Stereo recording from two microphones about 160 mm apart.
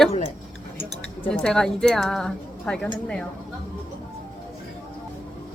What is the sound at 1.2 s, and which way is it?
A woman's voice, 5° left (ahead or behind).